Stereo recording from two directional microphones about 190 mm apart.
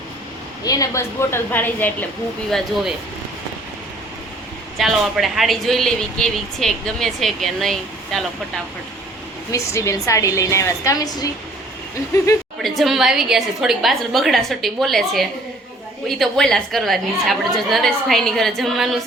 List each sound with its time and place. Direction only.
0.6 s a woman's voice: 20° left (ahead or behind)
4.8 s speech: centre (ahead or behind)
9.5 s a woman's voice: 15° left (ahead or behind)
12.6 s speech: centre (ahead or behind)